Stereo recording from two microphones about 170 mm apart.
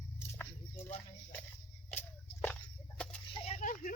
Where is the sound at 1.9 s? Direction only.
10° left (ahead or behind).